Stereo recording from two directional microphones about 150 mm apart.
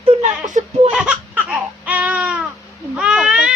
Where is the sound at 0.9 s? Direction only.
5° right (ahead or behind).